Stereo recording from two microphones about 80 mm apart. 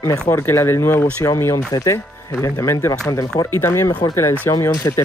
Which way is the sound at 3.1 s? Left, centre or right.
Left.